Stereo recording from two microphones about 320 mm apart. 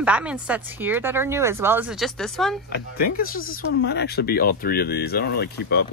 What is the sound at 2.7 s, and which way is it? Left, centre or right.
Speech, left.